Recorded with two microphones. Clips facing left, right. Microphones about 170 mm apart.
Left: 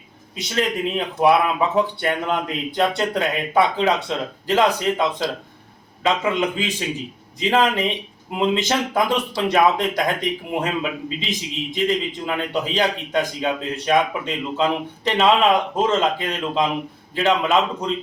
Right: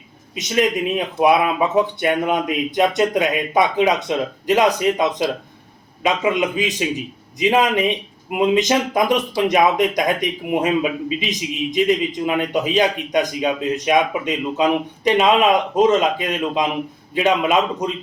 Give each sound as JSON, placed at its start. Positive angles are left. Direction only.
{"t": 0.3, "sound": "a man's voice", "side_deg": -15}